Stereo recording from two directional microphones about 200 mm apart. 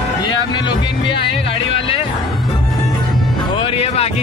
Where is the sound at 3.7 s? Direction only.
30° left (ahead or behind).